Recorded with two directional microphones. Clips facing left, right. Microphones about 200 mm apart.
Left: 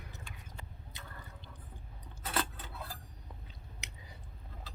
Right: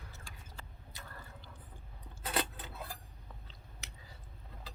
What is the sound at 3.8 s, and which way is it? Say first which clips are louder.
Chewing: left 1 dB; 20° left (ahead or behind).